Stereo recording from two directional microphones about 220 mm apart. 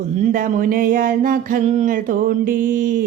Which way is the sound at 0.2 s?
40° right (ahead or behind).